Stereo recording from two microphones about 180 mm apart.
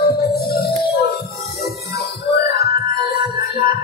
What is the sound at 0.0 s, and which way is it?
Music, 60° left (ahead or behind).